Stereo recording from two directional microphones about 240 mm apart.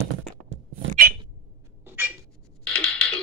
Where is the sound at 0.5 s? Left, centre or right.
Right.